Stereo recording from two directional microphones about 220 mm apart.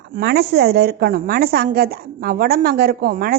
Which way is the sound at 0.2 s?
45° right (ahead or behind).